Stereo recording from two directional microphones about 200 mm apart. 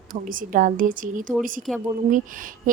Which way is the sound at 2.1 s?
40° right (ahead or behind).